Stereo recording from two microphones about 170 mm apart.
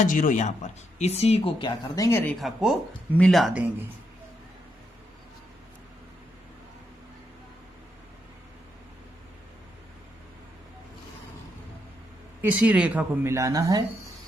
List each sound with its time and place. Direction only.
0.1 s speech: 50° left (ahead or behind)
1.6 s speech: 20° left (ahead or behind)
2.4 s speech: centre (ahead or behind)
12.4 s a woman's voice: 10° right (ahead or behind)